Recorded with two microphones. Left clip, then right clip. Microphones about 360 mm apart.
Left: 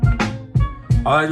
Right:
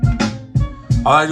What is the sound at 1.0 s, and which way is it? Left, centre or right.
Speech, centre.